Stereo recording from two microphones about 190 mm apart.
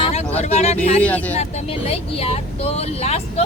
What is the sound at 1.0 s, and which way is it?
Speech, 10° left (ahead or behind).